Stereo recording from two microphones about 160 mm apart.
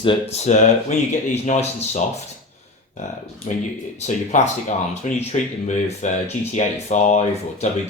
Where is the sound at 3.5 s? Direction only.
50° left (ahead or behind).